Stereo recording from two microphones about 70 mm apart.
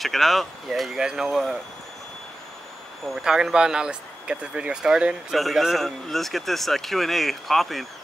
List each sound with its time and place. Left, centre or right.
0.0 s speech: centre
3.2 s speech: centre